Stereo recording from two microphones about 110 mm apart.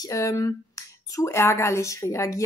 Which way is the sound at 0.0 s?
30° left (ahead or behind).